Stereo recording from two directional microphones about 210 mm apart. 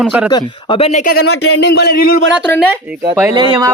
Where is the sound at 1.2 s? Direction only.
90° left.